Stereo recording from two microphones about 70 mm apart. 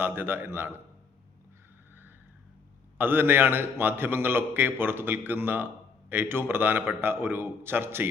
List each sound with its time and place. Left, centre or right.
0.0 s a man's voice: right
3.0 s a man's voice: right